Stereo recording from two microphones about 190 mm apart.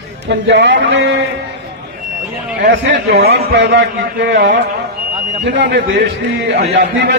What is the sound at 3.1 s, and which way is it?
A man's voice, 55° right (ahead or behind).